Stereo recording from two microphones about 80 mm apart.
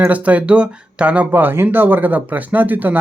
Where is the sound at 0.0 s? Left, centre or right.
Centre.